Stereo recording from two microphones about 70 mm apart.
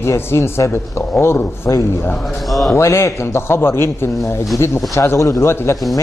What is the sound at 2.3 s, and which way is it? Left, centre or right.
Speech, centre.